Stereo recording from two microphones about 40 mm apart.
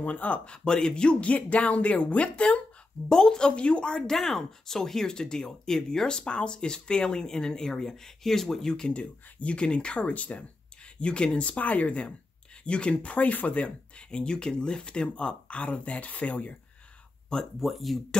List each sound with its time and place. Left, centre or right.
0.0 s speech: left
0.5 s speech: centre
1.3 s speech: left
4.1 s speech: centre
8.9 s speech: left
12.6 s speech: left
17.6 s speech: centre